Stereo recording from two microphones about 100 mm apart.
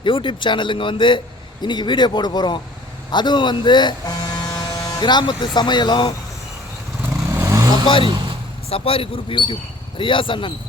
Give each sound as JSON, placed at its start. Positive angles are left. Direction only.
{"t": 0.0, "sound": "speech", "side_deg": 55}
{"t": 7.3, "sound": "vehicle", "side_deg": -30}
{"t": 8.7, "sound": "speech", "side_deg": 70}